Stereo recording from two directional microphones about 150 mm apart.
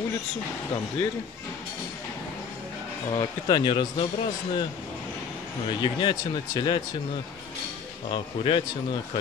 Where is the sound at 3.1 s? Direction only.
30° left (ahead or behind).